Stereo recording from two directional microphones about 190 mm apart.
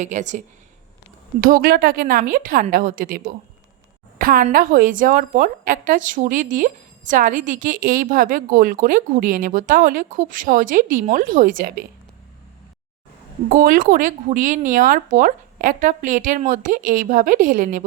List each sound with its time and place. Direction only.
0.0 s a woman's voice: 40° right (ahead or behind)
13.5 s a woman's voice: 50° right (ahead or behind)